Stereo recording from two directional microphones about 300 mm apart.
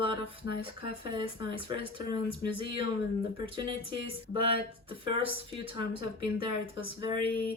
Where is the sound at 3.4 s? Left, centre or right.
Centre.